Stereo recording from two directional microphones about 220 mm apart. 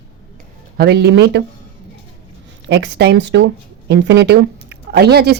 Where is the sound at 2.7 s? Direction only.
50° right (ahead or behind).